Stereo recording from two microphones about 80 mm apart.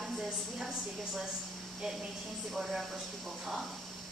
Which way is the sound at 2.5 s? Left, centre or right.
Centre.